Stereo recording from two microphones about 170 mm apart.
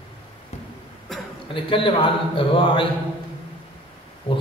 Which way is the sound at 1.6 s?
30° left (ahead or behind).